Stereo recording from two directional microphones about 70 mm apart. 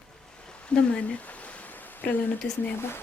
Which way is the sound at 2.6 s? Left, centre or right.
Left.